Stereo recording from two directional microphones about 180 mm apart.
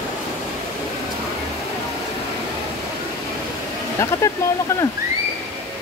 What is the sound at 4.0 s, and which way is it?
Speech, 15° left (ahead or behind).